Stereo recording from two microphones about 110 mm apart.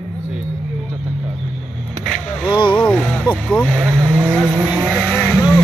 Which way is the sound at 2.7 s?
10° left (ahead or behind).